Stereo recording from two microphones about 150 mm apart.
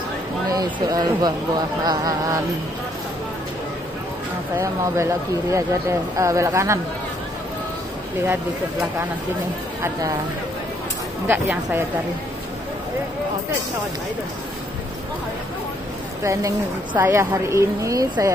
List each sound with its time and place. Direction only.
0.6 s speech: 25° right (ahead or behind)
4.6 s speech: 20° right (ahead or behind)
11.2 s a woman's voice: 15° right (ahead or behind)
16.3 s a woman's voice: 15° right (ahead or behind)